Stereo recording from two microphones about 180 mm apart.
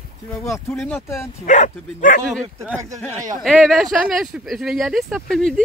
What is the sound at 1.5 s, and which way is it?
Speech, 40° left (ahead or behind).